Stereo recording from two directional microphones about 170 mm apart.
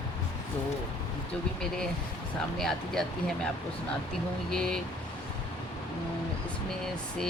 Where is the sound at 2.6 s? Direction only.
5° left (ahead or behind).